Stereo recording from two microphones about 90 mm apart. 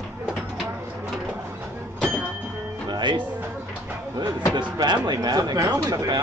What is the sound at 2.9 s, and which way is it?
Music, 60° right (ahead or behind).